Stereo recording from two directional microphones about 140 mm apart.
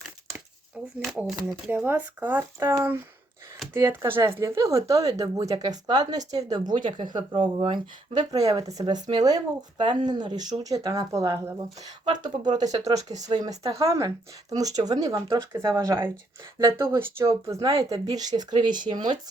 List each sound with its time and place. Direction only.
0.9 s speech: 5° right (ahead or behind); by 19.1 s 35° right (ahead or behind)